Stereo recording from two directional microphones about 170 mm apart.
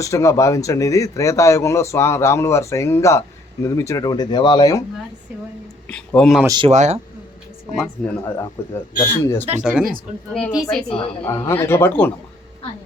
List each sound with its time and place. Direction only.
0.0 s speech: 20° left (ahead or behind)
5.9 s a woman's voice: 5° left (ahead or behind)
6.4 s speech: 25° right (ahead or behind)
6.7 s speech: 40° right (ahead or behind)
8.0 s a woman's voice: 5° left (ahead or behind)
8.6 s speech: 15° left (ahead or behind)
9.6 s a woman's voice: 5° right (ahead or behind)
11.3 s speech: 15° left (ahead or behind)